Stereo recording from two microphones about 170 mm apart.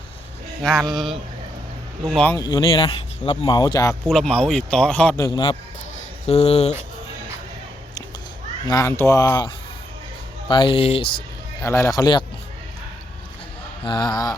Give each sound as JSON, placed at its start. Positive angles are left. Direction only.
{"t": 0.6, "sound": "speech", "side_deg": 0}
{"t": 2.3, "sound": "speech", "side_deg": 20}
{"t": 4.0, "sound": "speech", "side_deg": 0}
{"t": 5.1, "sound": "speech", "side_deg": 25}
{"t": 6.2, "sound": "speech", "side_deg": 35}
{"t": 8.6, "sound": "speech", "side_deg": 20}
{"t": 10.5, "sound": "speech", "side_deg": 30}
{"t": 11.6, "sound": "speech", "side_deg": 15}
{"t": 13.8, "sound": "speech", "side_deg": 25}